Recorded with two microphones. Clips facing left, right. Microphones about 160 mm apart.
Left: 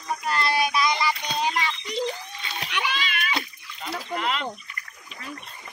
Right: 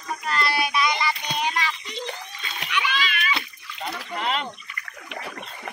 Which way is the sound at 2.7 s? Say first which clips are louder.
Right 3 dB; 50° left (ahead or behind).